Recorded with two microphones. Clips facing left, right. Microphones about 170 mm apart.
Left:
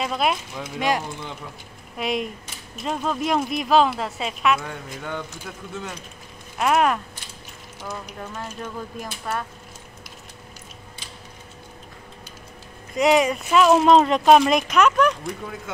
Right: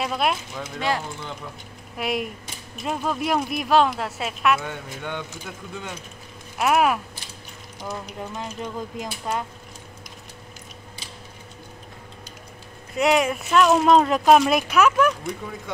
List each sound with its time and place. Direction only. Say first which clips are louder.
0.0 s speech: left 1 dB; centre (ahead or behind)
0.7 s speech: left 2 dB; 15° left (ahead or behind)
2.0 s speech: left 1 dB; centre (ahead or behind)
6.6 s speech: even; 5° right (ahead or behind)
8.2 s speech: right 2 dB; 15° right (ahead or behind)
12.9 s speech: left 2 dB; centre (ahead or behind)